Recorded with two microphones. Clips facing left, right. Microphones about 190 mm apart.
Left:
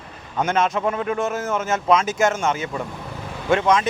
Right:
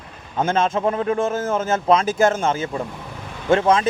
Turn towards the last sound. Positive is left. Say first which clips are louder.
# right 2 dB
turn(degrees=-30)  # may be behind; listen again after turning